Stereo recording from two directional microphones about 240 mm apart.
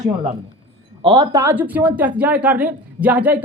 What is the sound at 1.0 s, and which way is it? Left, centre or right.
A man's voice, centre.